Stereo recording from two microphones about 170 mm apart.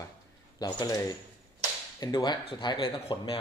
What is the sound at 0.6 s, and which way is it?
A man's voice, 25° left (ahead or behind).